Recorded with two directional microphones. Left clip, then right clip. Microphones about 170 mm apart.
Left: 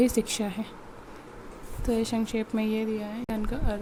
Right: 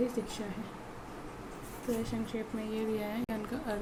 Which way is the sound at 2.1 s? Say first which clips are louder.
Left 8 dB; 65° left (ahead or behind).